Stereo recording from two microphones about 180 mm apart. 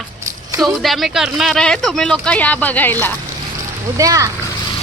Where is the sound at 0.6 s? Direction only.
Centre (ahead or behind).